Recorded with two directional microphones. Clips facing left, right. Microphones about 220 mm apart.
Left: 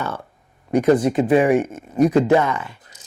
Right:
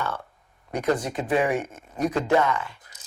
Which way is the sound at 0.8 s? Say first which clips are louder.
Left 9 dB; 20° left (ahead or behind).